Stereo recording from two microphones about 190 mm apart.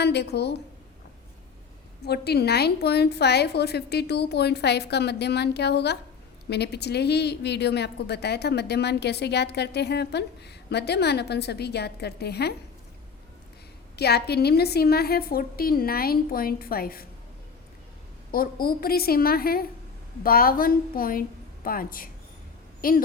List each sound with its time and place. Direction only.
0.0 s a woman's voice: 60° left (ahead or behind)
2.0 s a woman's voice: 55° left (ahead or behind)
13.9 s a woman's voice: 60° left (ahead or behind)
18.3 s a woman's voice: 50° left (ahead or behind)